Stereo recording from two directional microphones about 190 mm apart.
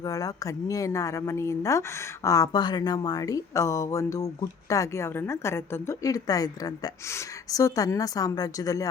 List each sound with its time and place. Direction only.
0.0 s speech: 20° left (ahead or behind)